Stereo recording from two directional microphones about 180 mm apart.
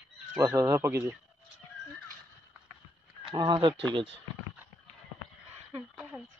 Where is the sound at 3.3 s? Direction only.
25° right (ahead or behind).